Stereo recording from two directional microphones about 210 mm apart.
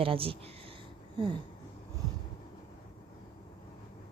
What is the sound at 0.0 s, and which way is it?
Speech, 25° right (ahead or behind).